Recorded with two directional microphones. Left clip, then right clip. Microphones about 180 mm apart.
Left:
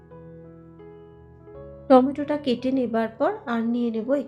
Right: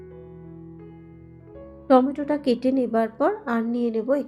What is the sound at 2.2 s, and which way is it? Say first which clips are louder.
A woman's voice: right 2 dB; 15° right (ahead or behind).